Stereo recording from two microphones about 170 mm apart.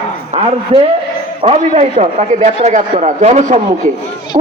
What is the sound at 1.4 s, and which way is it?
A man's voice, 35° right (ahead or behind).